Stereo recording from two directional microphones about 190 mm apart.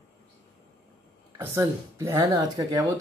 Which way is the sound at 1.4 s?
15° right (ahead or behind).